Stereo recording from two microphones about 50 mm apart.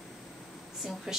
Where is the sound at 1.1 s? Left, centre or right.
Centre.